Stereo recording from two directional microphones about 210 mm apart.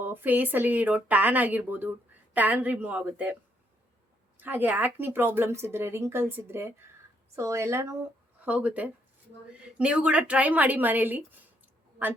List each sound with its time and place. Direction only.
0.0 s speech: 10° right (ahead or behind)
4.4 s speech: 10° right (ahead or behind)